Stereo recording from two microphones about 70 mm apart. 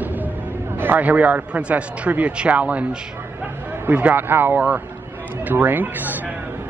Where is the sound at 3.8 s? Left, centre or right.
Right.